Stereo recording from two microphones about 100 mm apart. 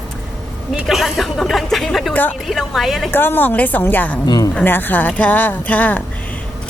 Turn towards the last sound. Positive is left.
turn(degrees=15)  # may be behind; listen again after turning